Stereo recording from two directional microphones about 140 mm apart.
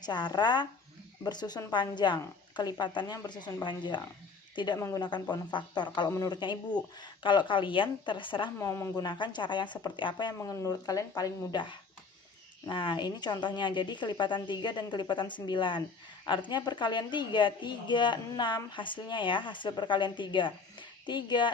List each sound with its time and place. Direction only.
0.0 s a woman's voice: 30° left (ahead or behind)
4.8 s speech: 20° left (ahead or behind)
5.3 s a woman's voice: 30° left (ahead or behind)
8.5 s speech: 20° left (ahead or behind)
9.0 s a woman's voice: 35° left (ahead or behind)